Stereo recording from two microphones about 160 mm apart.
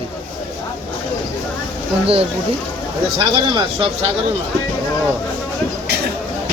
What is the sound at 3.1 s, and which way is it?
Speech, 30° right (ahead or behind).